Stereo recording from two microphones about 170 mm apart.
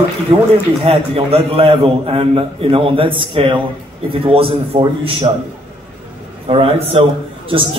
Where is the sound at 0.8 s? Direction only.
35° right (ahead or behind).